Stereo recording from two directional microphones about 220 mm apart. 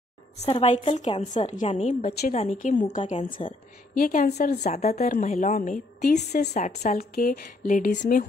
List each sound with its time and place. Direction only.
0.5 s a woman's voice: 25° left (ahead or behind)
3.9 s a woman's voice: 40° left (ahead or behind)